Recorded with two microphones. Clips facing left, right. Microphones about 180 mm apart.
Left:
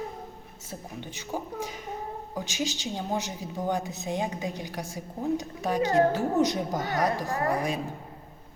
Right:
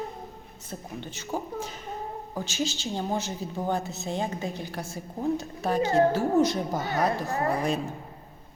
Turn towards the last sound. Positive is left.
turn(degrees=-30)  # may be behind; listen again after turning